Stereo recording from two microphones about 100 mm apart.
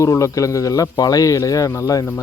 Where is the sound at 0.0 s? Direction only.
35° left (ahead or behind).